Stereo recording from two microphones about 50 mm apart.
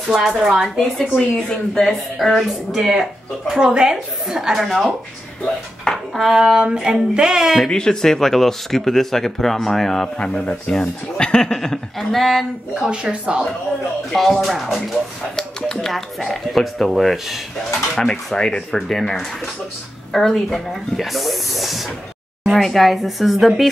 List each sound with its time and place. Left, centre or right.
0.2 s a woman's voice: centre
0.9 s a woman's voice: centre
4.6 s speech: centre
6.1 s a woman's voice: centre
7.6 s speech: centre
10.1 s speech: left; by 12.4 s centre
12.8 s speech: right
14.1 s speech: centre
15.3 s speech: centre
18.3 s speech: centre